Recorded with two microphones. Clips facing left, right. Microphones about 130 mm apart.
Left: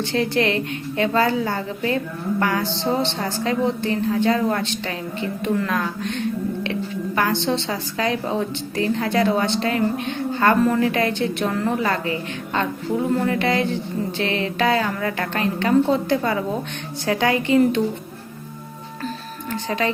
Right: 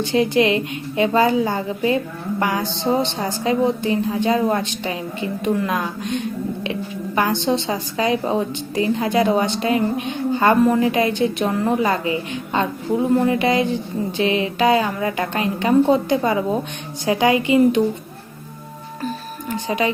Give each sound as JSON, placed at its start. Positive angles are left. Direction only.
{"t": 0.0, "sound": "a woman's voice", "side_deg": -15}
{"t": 7.2, "sound": "a woman's voice", "side_deg": -15}
{"t": 19.0, "sound": "music", "side_deg": -15}